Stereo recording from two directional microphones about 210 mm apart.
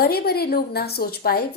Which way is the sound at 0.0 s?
50° left (ahead or behind).